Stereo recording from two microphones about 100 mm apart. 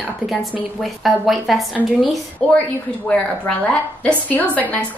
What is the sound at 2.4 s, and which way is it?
Speech, 10° left (ahead or behind).